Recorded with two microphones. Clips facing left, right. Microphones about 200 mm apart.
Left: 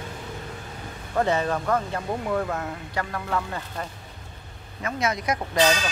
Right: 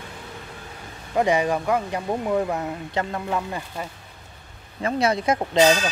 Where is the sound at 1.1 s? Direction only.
15° right (ahead or behind).